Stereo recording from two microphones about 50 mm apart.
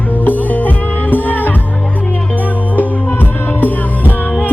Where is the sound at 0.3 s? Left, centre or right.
Left.